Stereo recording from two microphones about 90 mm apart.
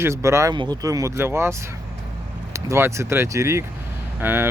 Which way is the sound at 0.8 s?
35° right (ahead or behind).